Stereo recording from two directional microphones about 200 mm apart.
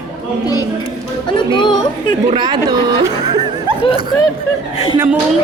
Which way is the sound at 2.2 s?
25° right (ahead or behind).